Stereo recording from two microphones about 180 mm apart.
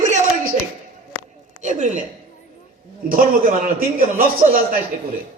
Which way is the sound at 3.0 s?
50° right (ahead or behind).